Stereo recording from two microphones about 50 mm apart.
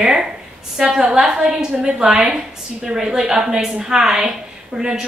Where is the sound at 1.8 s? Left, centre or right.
Right.